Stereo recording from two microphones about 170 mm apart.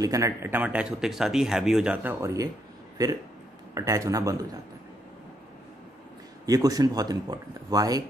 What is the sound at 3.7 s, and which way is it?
Speech, 20° right (ahead or behind).